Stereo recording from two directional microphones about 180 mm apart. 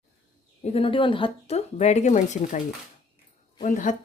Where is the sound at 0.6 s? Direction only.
30° left (ahead or behind).